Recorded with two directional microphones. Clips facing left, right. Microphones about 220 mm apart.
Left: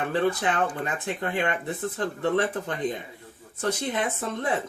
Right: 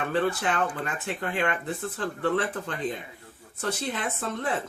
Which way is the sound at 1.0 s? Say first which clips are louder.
Even; 20° left (ahead or behind).